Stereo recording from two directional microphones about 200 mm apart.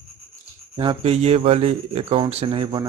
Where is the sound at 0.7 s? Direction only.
25° right (ahead or behind).